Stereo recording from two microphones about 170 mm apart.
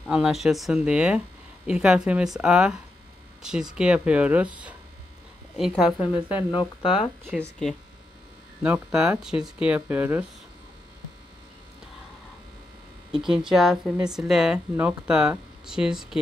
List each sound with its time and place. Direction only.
0.1 s speech: 5° right (ahead or behind)
5.9 s speech: 30° left (ahead or behind)
8.6 s speech: 5° right (ahead or behind)
13.1 s speech: centre (ahead or behind)